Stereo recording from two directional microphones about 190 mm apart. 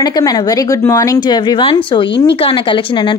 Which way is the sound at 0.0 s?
20° left (ahead or behind).